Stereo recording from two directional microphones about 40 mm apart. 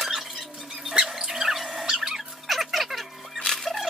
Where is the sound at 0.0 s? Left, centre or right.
Centre.